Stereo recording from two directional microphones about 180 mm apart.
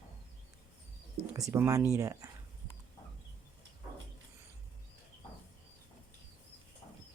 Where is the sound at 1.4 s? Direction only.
15° right (ahead or behind).